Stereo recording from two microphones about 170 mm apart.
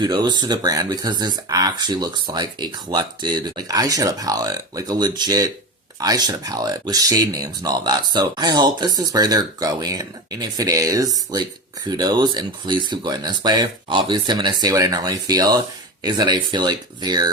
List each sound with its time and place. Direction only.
0.0 s speech: 25° right (ahead or behind)